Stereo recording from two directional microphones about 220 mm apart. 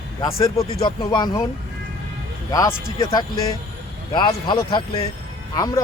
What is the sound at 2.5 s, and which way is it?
Speech, 15° left (ahead or behind).